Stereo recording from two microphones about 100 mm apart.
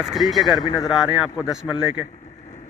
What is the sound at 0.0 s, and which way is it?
Speech, centre (ahead or behind).